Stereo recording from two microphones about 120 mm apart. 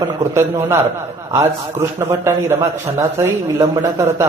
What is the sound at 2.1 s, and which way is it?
Speech, 20° right (ahead or behind).